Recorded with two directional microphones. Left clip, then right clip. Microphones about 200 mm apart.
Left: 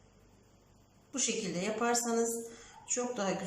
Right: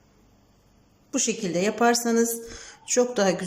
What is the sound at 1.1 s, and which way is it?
A woman's voice, 40° right (ahead or behind).